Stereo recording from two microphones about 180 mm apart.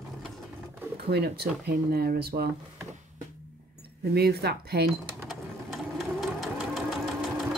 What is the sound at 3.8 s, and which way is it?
Speech, 65° right (ahead or behind).